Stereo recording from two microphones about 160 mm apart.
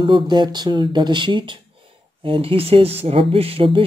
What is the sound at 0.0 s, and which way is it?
Speech, 30° right (ahead or behind).